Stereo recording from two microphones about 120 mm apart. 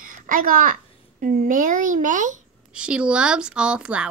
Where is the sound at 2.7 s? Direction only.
10° right (ahead or behind).